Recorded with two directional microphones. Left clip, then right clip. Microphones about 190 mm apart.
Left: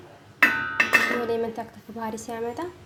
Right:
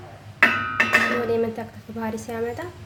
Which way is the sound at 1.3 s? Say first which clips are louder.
Right 3 dB; 15° left (ahead or behind).